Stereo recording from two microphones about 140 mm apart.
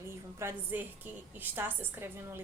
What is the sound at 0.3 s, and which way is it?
A woman's voice, 15° right (ahead or behind).